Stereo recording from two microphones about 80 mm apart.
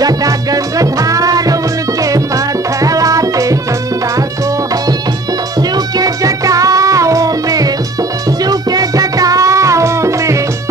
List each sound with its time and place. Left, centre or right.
0.0 s music: right
5.6 s music: right